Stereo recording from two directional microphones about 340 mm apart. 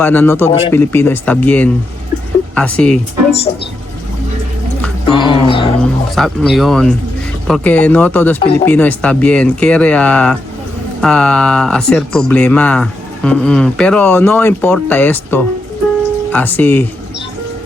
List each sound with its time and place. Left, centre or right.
0.0 s speech: centre
5.1 s music: centre
5.8 s speech: centre